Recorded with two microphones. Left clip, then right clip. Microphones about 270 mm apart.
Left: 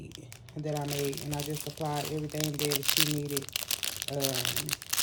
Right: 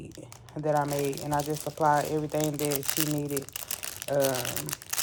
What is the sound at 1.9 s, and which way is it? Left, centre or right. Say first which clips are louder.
Speech: right 10 dB; right.